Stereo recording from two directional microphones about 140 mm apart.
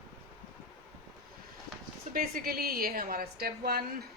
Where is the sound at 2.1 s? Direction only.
90° right.